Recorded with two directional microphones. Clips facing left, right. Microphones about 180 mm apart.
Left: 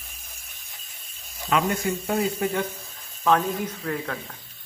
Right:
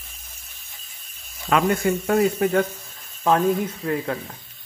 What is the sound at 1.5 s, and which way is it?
Speech, 55° right (ahead or behind).